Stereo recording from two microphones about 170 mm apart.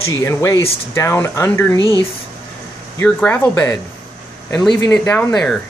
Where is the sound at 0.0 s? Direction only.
15° left (ahead or behind).